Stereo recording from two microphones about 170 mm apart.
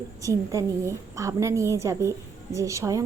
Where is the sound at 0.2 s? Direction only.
20° right (ahead or behind).